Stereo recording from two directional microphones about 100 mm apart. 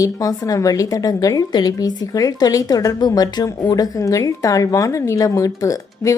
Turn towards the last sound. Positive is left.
turn(degrees=35)  # may be behind; listen again after turning